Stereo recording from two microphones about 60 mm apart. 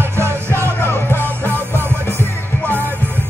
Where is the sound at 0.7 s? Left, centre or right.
Left.